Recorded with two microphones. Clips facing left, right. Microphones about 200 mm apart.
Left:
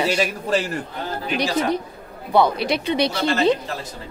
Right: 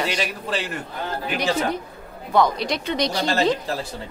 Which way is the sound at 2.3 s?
10° left (ahead or behind).